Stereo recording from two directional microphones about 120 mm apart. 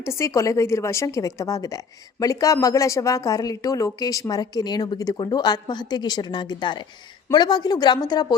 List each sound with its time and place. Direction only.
0.0 s a woman's voice: 25° left (ahead or behind)